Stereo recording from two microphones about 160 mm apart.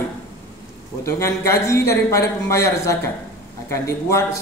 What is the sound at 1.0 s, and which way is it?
A man's voice, 15° left (ahead or behind).